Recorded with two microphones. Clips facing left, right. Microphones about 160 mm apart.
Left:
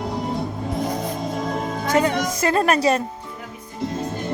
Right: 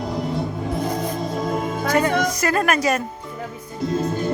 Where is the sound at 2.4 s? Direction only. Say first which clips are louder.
Left 2 dB; 25° left (ahead or behind).